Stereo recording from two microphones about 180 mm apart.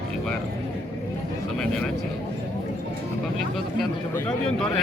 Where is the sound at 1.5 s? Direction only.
Centre (ahead or behind).